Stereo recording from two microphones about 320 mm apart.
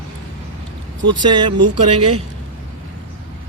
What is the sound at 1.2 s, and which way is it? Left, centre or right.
Speech, centre.